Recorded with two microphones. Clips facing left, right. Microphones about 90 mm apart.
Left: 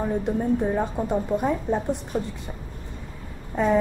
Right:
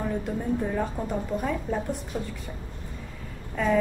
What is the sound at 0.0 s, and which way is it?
A woman's voice, 25° left (ahead or behind).